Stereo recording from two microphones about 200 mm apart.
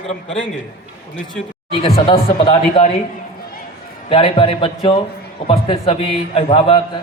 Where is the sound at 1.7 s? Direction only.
25° left (ahead or behind).